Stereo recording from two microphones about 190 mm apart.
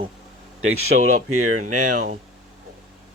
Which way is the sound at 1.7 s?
45° right (ahead or behind).